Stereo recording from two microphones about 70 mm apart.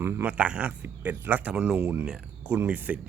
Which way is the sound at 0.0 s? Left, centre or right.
Right.